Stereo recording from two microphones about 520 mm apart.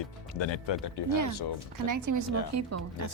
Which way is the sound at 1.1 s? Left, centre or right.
Right.